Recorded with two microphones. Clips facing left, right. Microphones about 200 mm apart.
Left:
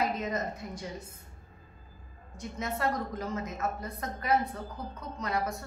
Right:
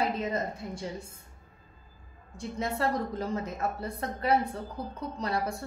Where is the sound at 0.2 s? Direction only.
30° right (ahead or behind).